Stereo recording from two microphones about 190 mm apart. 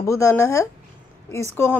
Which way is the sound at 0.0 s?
15° left (ahead or behind).